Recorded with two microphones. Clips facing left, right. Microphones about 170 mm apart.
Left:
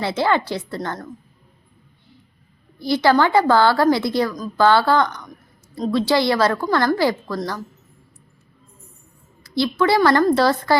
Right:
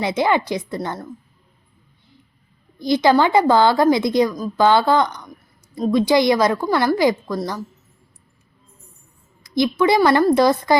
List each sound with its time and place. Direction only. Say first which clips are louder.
0.0 s a woman's voice: right 1 dB; 15° right (ahead or behind)
2.7 s a woman's voice: right 1 dB; 15° right (ahead or behind)
9.4 s a woman's voice: right 2 dB; 15° right (ahead or behind)